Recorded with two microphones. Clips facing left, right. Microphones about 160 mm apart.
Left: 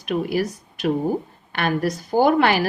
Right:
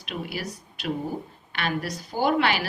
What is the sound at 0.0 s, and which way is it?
Speech, 45° left (ahead or behind).